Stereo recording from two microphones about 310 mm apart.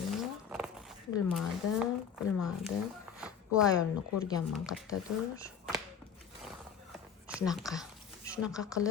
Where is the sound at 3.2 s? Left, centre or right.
Centre.